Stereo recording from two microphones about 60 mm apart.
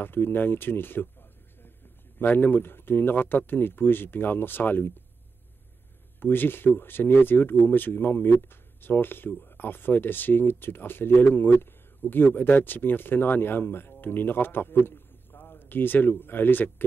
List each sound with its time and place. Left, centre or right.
0.0 s speech: left
2.1 s speech: left
6.1 s speech: left